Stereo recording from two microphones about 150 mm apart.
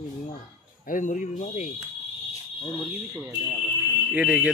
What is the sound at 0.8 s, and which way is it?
Speech, 60° left (ahead or behind).